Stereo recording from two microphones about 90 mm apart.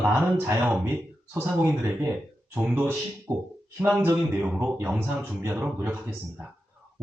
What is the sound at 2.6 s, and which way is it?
Speech, 20° right (ahead or behind).